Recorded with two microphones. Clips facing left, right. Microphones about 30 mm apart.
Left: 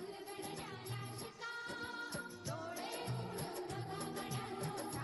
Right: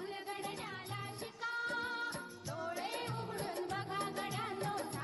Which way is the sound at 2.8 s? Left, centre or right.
Right.